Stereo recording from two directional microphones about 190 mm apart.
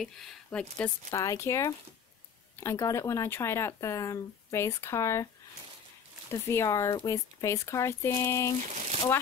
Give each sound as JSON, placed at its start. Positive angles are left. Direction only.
{"t": 0.0, "sound": "speech", "side_deg": 0}
{"t": 6.3, "sound": "speech", "side_deg": 15}
{"t": 8.6, "sound": "crumpling", "side_deg": -35}